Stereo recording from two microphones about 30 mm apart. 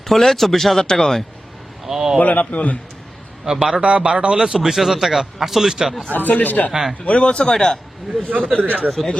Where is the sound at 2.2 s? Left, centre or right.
Left.